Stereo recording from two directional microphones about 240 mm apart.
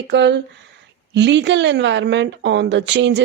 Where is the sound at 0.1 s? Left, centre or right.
Right.